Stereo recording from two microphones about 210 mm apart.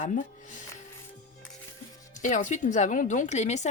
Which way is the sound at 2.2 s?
35° left (ahead or behind).